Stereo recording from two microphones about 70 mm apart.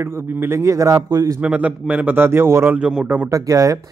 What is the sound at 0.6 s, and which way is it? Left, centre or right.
Speech, right.